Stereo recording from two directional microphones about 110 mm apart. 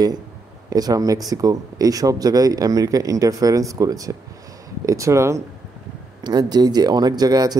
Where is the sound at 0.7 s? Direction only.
35° right (ahead or behind).